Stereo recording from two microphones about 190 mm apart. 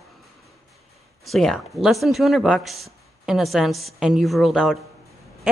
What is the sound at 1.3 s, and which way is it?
A woman's voice, centre (ahead or behind).